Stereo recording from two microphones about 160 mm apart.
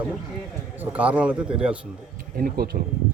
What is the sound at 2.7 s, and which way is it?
Speech, 60° right (ahead or behind).